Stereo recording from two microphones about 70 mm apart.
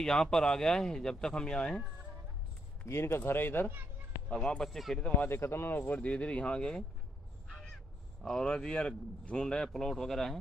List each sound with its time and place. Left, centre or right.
0.0 s speech: centre
2.8 s speech: left
4.3 s speech: centre
5.2 s speech: left; by 10.4 s centre